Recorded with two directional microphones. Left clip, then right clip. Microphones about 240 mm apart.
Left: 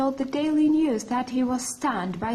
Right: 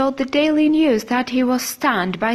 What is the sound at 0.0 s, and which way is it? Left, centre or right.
A woman's voice, right.